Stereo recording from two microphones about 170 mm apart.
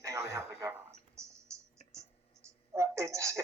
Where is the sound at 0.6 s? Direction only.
15° right (ahead or behind).